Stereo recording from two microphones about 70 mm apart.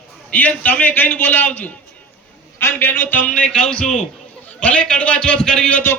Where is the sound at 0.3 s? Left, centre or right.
Left.